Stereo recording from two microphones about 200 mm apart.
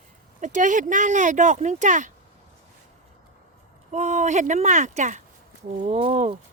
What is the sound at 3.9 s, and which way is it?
Speech, 35° right (ahead or behind).